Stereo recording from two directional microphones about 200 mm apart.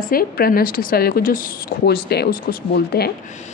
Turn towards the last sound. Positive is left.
turn(degrees=50)  # may be behind; listen again after turning